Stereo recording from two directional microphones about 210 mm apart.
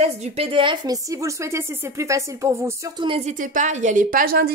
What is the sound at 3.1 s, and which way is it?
Speech, 30° right (ahead or behind).